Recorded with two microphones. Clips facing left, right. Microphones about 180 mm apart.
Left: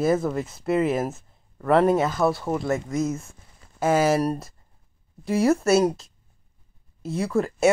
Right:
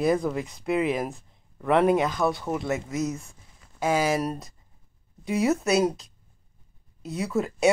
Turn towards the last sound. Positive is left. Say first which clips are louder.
# left 3 dB
turn(degrees=0)  # may be behind; listen again after turning